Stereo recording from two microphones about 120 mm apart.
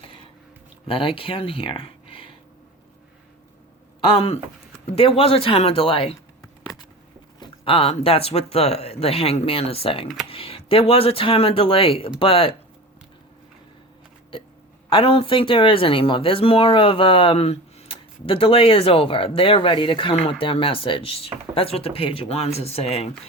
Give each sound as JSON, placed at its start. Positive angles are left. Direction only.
{"t": 0.9, "sound": "speech", "side_deg": 45}
{"t": 4.9, "sound": "speech", "side_deg": 50}
{"t": 7.3, "sound": "speech", "side_deg": 45}
{"t": 14.8, "sound": "speech", "side_deg": 50}